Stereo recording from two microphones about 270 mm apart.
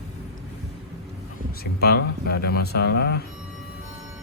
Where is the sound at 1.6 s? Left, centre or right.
Left.